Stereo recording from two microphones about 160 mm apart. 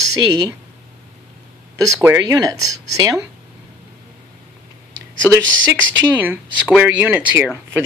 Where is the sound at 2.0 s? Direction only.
20° right (ahead or behind).